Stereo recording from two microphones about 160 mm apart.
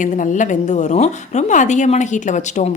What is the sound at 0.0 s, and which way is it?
A woman's voice, 50° left (ahead or behind).